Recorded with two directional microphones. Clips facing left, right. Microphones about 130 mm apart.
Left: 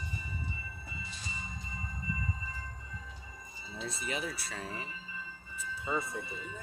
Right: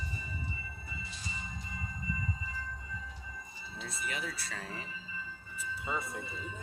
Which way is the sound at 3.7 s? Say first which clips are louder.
Left 3 dB; 25° left (ahead or behind).